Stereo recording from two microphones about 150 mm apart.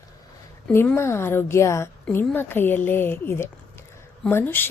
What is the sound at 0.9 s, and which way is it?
A woman's voice, 15° left (ahead or behind).